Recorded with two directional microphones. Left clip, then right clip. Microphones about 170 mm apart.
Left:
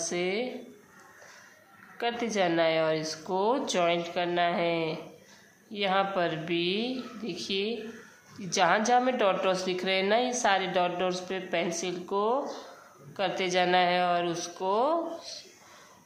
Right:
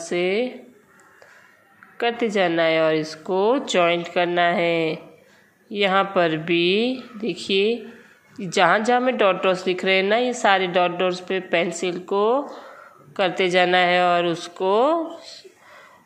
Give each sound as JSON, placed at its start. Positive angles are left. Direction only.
{"t": 0.0, "sound": "speech", "side_deg": -25}
{"t": 2.0, "sound": "a woman's voice", "side_deg": -25}